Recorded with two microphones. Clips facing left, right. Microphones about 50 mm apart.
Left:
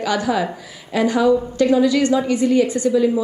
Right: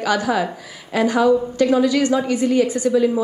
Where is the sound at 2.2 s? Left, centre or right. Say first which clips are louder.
Left 1 dB; left.